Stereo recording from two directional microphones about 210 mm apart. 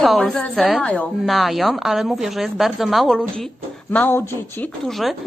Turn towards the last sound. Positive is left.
turn(degrees=0)  # may be behind; listen again after turning